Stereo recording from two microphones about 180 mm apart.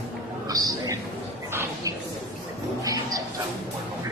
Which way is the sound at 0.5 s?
20° right (ahead or behind).